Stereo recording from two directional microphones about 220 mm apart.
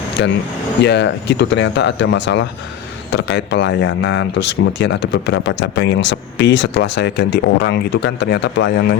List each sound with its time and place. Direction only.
0.8 s speech: 50° left (ahead or behind)